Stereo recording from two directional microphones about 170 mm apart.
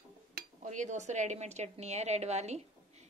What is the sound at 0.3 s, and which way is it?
Dishes, 60° right (ahead or behind).